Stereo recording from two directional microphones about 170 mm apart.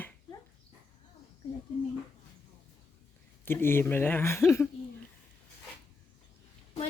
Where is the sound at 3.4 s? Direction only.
15° left (ahead or behind).